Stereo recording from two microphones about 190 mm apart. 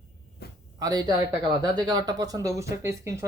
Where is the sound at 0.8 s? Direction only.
20° right (ahead or behind).